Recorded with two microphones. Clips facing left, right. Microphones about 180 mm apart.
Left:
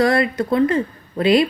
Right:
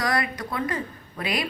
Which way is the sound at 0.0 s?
25° left (ahead or behind).